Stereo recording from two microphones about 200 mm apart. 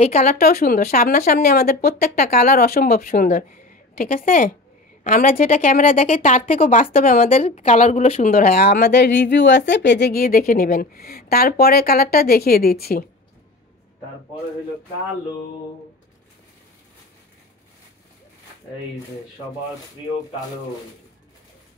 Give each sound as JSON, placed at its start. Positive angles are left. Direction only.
{"t": 0.0, "sound": "a woman's voice", "side_deg": 35}
{"t": 7.2, "sound": "speech", "side_deg": 30}